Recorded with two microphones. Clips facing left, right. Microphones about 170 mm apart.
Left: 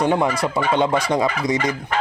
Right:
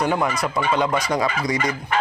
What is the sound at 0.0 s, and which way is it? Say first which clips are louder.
Fowl: left 3 dB; 25° left (ahead or behind).